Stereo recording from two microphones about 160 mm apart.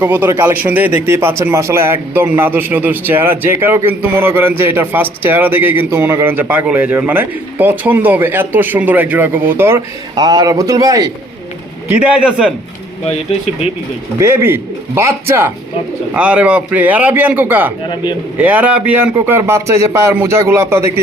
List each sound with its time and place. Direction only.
0.0 s speech: 10° right (ahead or behind)
10.2 s a man's voice: 25° right (ahead or behind)
11.9 s speech: 5° right (ahead or behind)
14.2 s speech: 15° right (ahead or behind)
17.8 s a man's voice: 30° left (ahead or behind)
18.3 s speech: 10° right (ahead or behind)